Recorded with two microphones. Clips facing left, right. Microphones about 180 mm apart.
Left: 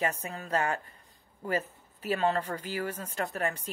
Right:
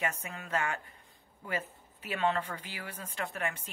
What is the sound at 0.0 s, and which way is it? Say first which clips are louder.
Speech: left 4 dB; 35° left (ahead or behind).